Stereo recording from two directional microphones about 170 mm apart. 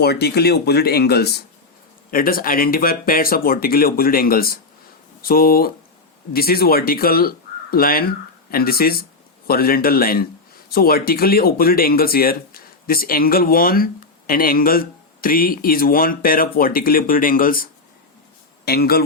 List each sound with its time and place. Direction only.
0.0 s speech: 70° left (ahead or behind)
2.0 s speech: 55° left (ahead or behind)
18.6 s speech: 65° left (ahead or behind)